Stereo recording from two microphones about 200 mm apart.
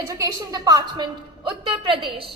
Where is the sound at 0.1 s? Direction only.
20° right (ahead or behind).